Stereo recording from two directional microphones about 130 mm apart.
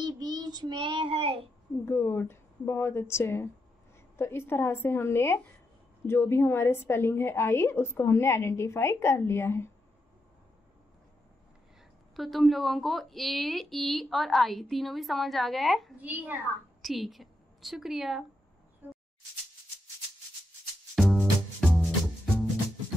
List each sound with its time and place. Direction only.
0.0 s child singing: 35° right (ahead or behind)
1.9 s a woman's voice: 20° left (ahead or behind)
12.2 s a woman's voice: centre (ahead or behind)
16.0 s a child's voice: 15° right (ahead or behind)
16.8 s a woman's voice: centre (ahead or behind)
20.9 s music: centre (ahead or behind)